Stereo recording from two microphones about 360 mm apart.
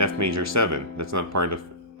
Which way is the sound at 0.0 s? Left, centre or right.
Right.